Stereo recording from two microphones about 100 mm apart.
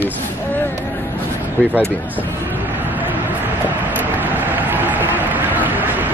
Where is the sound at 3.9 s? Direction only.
20° right (ahead or behind).